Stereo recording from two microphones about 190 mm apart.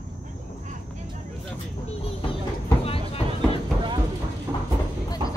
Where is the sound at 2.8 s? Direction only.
30° left (ahead or behind).